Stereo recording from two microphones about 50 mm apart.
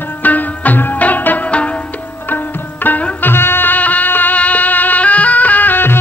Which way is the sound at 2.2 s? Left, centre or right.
Left.